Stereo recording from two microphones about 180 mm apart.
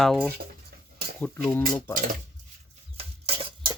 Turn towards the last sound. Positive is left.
turn(degrees=-30)  # may be behind; listen again after turning